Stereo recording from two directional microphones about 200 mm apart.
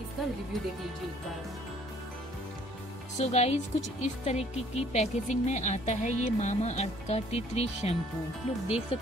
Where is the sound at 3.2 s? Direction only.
35° left (ahead or behind).